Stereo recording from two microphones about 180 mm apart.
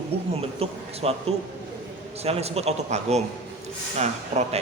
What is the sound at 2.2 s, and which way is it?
A man's voice, 35° right (ahead or behind).